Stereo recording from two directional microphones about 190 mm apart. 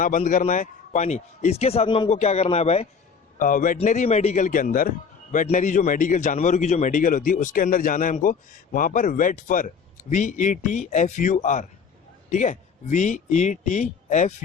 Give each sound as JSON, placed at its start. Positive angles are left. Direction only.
{"t": 0.0, "sound": "a man's voice", "side_deg": 45}
{"t": 3.3, "sound": "a man's voice", "side_deg": 45}